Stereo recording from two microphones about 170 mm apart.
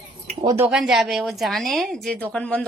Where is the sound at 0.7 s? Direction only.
5° right (ahead or behind).